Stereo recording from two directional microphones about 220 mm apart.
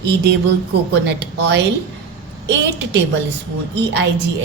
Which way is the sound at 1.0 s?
50° right (ahead or behind).